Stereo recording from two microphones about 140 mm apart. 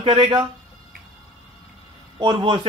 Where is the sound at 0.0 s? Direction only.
40° right (ahead or behind).